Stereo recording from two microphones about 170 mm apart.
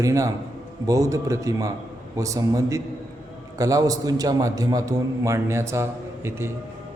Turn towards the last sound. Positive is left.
turn(degrees=-15)  # may be behind; listen again after turning